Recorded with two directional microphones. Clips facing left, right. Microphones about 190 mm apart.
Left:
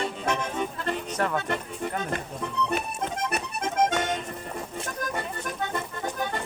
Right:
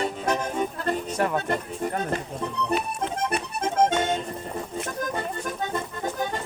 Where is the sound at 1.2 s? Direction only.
15° right (ahead or behind).